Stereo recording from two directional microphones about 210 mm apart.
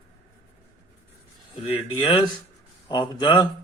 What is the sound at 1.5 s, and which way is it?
A man's voice, 20° left (ahead or behind).